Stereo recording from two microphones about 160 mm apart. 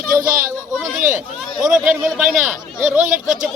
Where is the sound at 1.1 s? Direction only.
5° right (ahead or behind).